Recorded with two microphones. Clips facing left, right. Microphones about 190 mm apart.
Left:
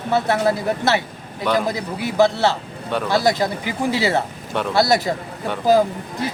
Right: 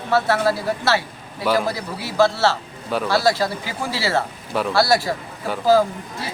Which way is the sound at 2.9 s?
Centre (ahead or behind).